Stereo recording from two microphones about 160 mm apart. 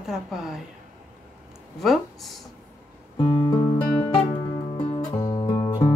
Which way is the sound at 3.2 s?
30° left (ahead or behind).